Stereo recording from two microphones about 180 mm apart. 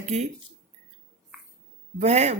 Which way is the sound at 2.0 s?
35° right (ahead or behind).